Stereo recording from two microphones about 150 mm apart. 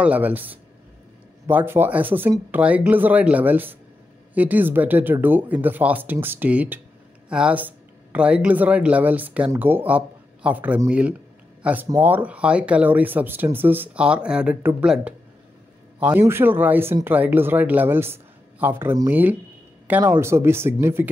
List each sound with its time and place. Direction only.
0.0 s speech: 10° right (ahead or behind)